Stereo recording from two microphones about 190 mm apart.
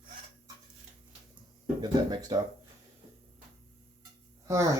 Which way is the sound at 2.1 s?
20° right (ahead or behind).